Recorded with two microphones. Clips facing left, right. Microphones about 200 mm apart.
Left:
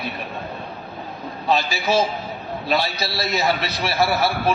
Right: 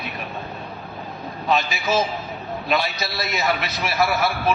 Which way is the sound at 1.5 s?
30° left (ahead or behind).